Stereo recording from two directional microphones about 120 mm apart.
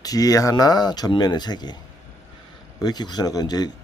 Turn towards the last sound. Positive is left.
turn(degrees=35)  # may be behind; listen again after turning